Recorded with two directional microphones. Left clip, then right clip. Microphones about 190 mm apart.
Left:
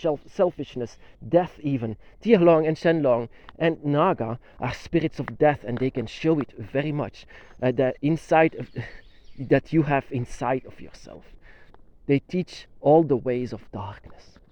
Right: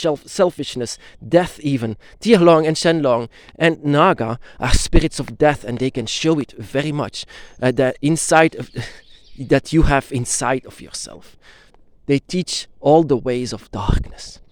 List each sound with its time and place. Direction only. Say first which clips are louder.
0.0 s speech: right 6 dB; 50° right (ahead or behind)